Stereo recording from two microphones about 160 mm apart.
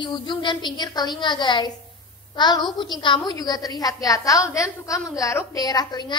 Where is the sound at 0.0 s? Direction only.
30° left (ahead or behind).